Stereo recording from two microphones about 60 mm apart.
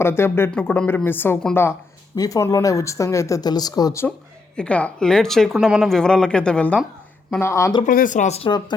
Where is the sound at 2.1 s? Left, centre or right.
Left.